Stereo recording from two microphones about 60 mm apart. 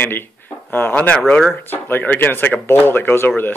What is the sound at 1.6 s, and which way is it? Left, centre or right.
Speech, left.